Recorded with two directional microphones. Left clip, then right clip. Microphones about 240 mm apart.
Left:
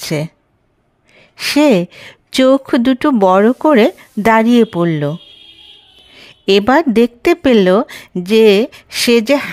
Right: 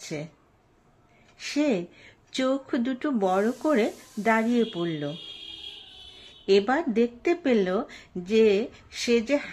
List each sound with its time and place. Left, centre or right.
0.0 s speech: left
1.3 s a woman's voice: left
6.4 s a woman's voice: left